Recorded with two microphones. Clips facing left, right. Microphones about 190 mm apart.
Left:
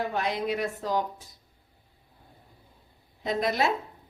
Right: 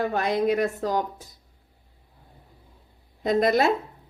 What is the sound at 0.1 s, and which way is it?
Speech, 45° right (ahead or behind).